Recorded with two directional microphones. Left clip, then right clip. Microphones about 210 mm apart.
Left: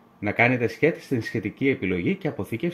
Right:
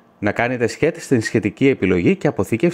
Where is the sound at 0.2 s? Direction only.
20° right (ahead or behind).